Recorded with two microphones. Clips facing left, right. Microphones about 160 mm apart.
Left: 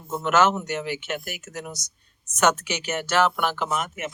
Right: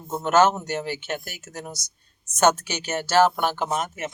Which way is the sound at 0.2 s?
35° right (ahead or behind).